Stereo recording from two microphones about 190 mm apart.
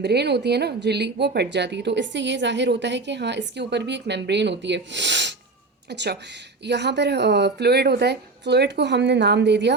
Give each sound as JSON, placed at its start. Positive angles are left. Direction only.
{"t": 0.0, "sound": "a woman's voice", "side_deg": -60}